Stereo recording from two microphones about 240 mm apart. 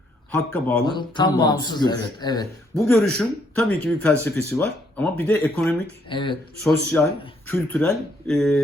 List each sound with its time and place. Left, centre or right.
0.3 s speech: centre
0.9 s speech: centre
2.7 s speech: centre
6.1 s speech: left
6.7 s speech: centre